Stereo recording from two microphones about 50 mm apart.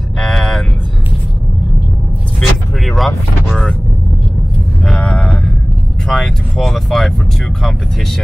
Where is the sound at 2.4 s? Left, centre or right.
Centre.